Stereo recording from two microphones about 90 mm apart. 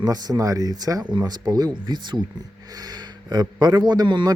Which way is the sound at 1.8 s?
60° right (ahead or behind).